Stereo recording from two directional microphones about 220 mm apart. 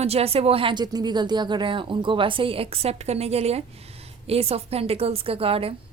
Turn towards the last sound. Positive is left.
turn(degrees=-25)  # may be behind; listen again after turning